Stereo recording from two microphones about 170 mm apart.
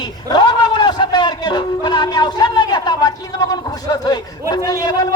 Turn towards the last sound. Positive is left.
turn(degrees=25)  # may be behind; listen again after turning